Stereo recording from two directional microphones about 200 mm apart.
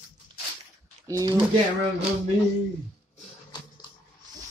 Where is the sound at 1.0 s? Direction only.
15° right (ahead or behind).